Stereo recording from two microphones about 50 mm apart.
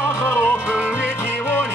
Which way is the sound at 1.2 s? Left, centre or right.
Left.